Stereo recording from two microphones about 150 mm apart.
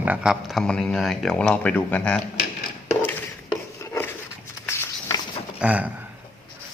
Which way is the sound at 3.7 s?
20° left (ahead or behind).